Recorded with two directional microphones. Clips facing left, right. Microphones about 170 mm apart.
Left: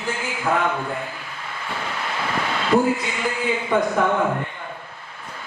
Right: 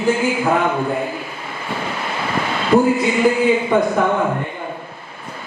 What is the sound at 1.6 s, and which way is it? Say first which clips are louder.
Vehicle: right 4 dB; 10° right (ahead or behind).